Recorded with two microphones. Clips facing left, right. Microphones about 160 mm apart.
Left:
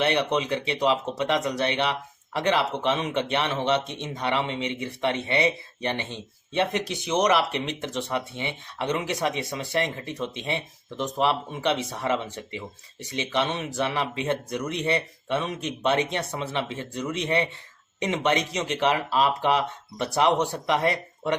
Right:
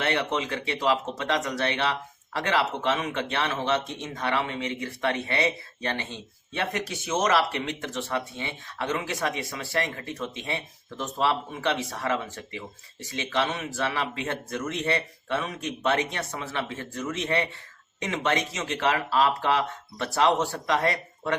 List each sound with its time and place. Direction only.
0.0 s speech: 20° left (ahead or behind)